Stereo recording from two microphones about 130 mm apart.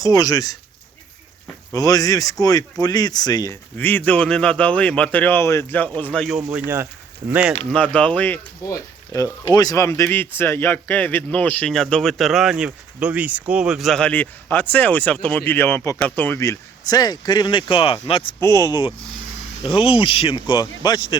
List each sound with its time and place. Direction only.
0.0 s speech: 30° left (ahead or behind)
1.7 s speech: 25° left (ahead or behind)
3.8 s speech: 15° left (ahead or behind)
6.2 s speech: 5° right (ahead or behind)
7.7 s speech: 10° left (ahead or behind)
8.6 s speech: 25° left (ahead or behind); by 18.3 s 45° left (ahead or behind)
18.3 s speech: 25° left (ahead or behind)
19.6 s speech: 45° left (ahead or behind)